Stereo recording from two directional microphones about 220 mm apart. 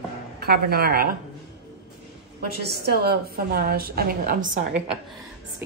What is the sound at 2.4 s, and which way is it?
A woman's voice, 45° right (ahead or behind).